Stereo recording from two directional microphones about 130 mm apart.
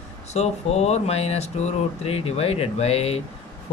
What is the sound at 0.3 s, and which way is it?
Speech, 55° left (ahead or behind).